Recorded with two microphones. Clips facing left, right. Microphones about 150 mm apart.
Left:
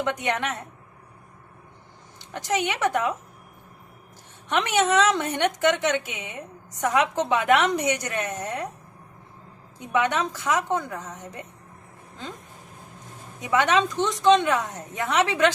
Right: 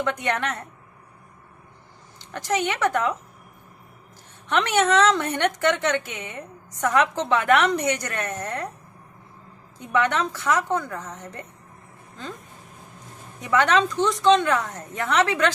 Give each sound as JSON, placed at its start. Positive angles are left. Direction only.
{"t": 0.0, "sound": "a woman's voice", "side_deg": 20}
{"t": 2.3, "sound": "a woman's voice", "side_deg": 15}
{"t": 4.4, "sound": "a woman's voice", "side_deg": 15}
{"t": 9.7, "sound": "a woman's voice", "side_deg": 15}
{"t": 13.4, "sound": "a woman's voice", "side_deg": 15}